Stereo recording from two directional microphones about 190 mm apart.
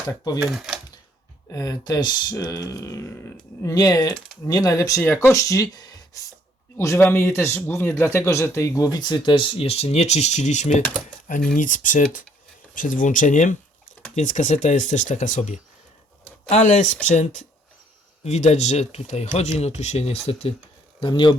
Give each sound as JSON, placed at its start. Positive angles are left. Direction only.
{"t": 0.4, "sound": "speech", "side_deg": -5}
{"t": 1.5, "sound": "speech", "side_deg": 20}
{"t": 4.9, "sound": "a man's voice", "side_deg": 5}